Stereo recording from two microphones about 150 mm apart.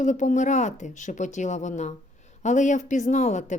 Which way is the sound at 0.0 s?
55° left (ahead or behind).